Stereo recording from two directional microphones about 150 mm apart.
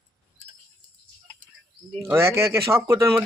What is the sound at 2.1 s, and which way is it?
Speech, 20° right (ahead or behind).